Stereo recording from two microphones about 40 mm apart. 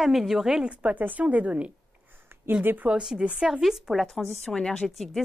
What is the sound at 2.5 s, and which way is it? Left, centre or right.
Speech, right.